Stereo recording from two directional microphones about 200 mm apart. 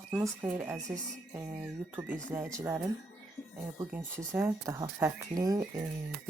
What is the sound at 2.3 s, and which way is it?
Speech, 10° right (ahead or behind).